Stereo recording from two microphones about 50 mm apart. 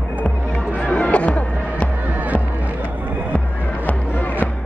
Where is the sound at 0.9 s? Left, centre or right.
Left.